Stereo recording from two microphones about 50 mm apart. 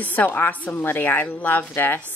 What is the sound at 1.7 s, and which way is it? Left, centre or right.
Speech, left.